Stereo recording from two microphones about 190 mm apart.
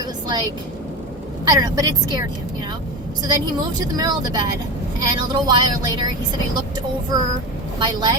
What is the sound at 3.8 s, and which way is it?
A woman's voice, 20° right (ahead or behind).